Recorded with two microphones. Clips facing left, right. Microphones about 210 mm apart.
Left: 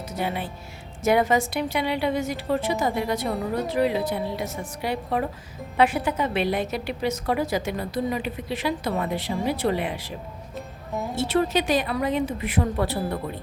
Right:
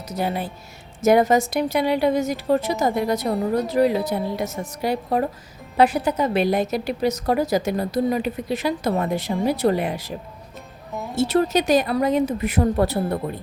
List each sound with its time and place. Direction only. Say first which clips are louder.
0.1 s a woman's voice: right 4 dB; 40° right (ahead or behind)
11.2 s a woman's voice: right 4 dB; 40° right (ahead or behind)